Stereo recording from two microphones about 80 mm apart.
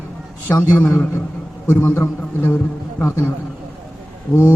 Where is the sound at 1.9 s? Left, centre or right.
Left.